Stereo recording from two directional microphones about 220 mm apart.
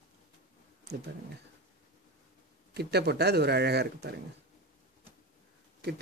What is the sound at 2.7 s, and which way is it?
Speech, 45° right (ahead or behind).